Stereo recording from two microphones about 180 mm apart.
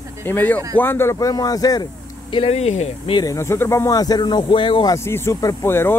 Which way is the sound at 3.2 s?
15° left (ahead or behind).